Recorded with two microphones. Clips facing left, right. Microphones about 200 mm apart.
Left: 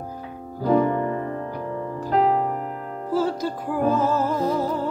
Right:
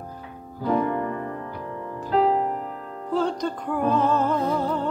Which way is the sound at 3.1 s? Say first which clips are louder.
Left 1 dB; 5° left (ahead or behind).